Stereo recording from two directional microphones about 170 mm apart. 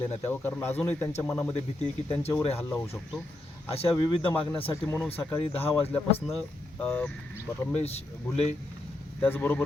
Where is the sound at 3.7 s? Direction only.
35° left (ahead or behind).